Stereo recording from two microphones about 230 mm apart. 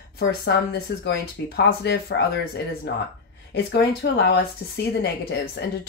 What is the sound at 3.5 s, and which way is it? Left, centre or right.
Speech, left.